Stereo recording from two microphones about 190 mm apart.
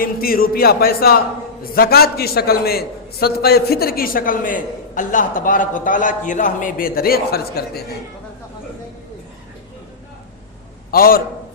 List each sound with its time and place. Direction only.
0.0 s a man's voice: 50° left (ahead or behind)
10.9 s a man's voice: 50° left (ahead or behind)